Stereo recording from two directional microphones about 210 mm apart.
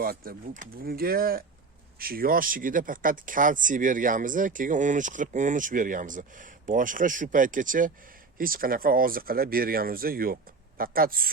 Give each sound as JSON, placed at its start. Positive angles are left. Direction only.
{"t": 0.0, "sound": "speech", "side_deg": -45}